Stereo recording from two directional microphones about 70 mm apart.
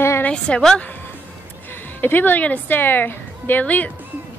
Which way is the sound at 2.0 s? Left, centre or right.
Left.